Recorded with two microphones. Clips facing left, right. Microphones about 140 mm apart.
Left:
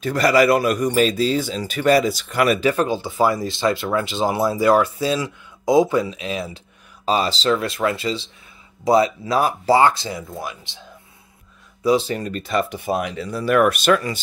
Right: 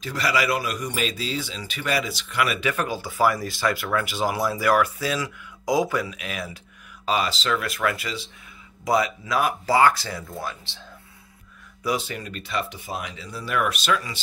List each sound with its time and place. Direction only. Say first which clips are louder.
0.0 s speech: left 9 dB; 50° left (ahead or behind); by 10.8 s 15° left (ahead or behind)
11.8 s speech: left 8 dB; 30° left (ahead or behind); by 14.2 s 55° left (ahead or behind)